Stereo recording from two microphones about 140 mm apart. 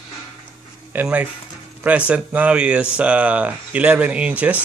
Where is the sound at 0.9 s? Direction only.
10° right (ahead or behind).